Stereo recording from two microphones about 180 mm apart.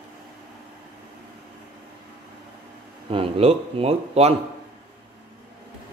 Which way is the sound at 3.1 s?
30° right (ahead or behind).